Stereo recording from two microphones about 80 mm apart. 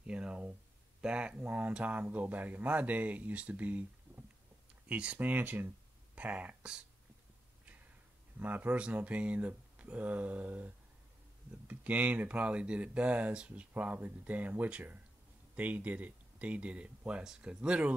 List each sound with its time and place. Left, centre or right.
0.0 s speech: centre
8.4 s speech: right